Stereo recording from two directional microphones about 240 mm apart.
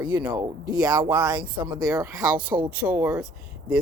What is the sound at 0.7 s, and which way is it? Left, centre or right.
Speech, centre.